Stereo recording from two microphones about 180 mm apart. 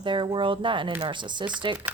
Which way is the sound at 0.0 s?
25° right (ahead or behind).